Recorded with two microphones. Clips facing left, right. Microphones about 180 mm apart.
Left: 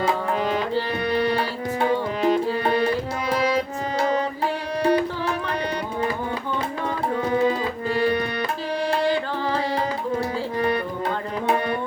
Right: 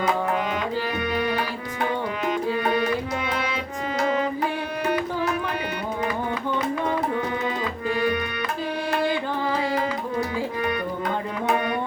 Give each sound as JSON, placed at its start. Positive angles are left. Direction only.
{"t": 1.1, "sound": "music", "side_deg": 35}
{"t": 4.8, "sound": "music", "side_deg": 30}
{"t": 7.3, "sound": "music", "side_deg": 35}
{"t": 9.7, "sound": "music", "side_deg": 35}